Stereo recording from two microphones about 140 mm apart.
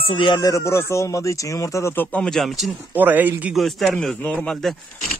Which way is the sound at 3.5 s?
Centre (ahead or behind).